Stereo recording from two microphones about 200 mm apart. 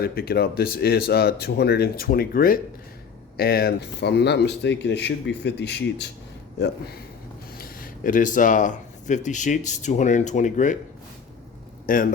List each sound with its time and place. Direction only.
0.0 s speech: 50° left (ahead or behind)
7.5 s speech: 45° left (ahead or behind)
11.9 s speech: 45° left (ahead or behind)